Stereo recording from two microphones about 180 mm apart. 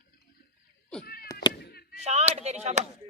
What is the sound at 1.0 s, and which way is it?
Cat, 55° left (ahead or behind).